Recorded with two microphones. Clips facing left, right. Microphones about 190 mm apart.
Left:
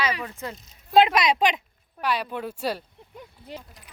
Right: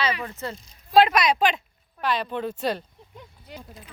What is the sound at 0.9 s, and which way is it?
Speech, 20° left (ahead or behind).